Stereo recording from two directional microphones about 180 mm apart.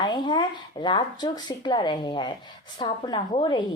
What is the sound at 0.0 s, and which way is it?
A woman's voice, 25° left (ahead or behind).